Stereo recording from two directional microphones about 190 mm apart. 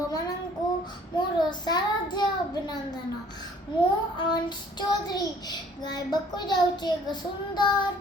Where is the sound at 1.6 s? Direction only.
20° left (ahead or behind).